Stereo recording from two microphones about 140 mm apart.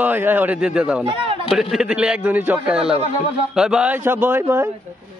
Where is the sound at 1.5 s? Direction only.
5° right (ahead or behind); by 4.7 s 20° right (ahead or behind).